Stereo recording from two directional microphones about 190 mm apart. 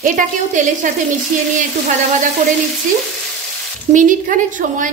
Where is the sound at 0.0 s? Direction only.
45° right (ahead or behind).